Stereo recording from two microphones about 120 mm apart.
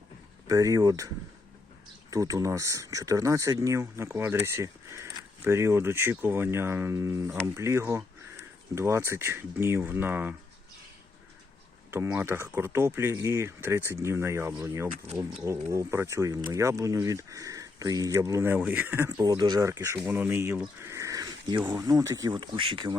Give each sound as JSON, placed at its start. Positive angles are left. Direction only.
{"t": 0.4, "sound": "speech", "side_deg": -30}
{"t": 11.9, "sound": "speech", "side_deg": -20}
{"t": 19.2, "sound": "speech", "side_deg": -35}
{"t": 20.8, "sound": "a sound", "side_deg": -25}
{"t": 21.8, "sound": "speech", "side_deg": -30}